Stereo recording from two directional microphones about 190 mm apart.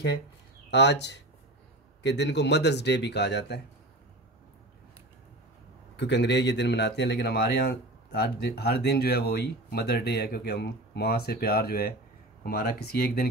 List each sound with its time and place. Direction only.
0.7 s a man's voice: 65° left (ahead or behind)
5.9 s a man's voice: 65° left (ahead or behind)